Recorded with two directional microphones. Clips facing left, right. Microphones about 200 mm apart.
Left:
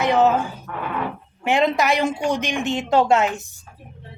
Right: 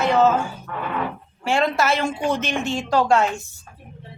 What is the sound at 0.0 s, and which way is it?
Speech, 15° left (ahead or behind).